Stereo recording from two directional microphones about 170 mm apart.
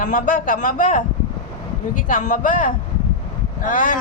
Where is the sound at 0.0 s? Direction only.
50° left (ahead or behind).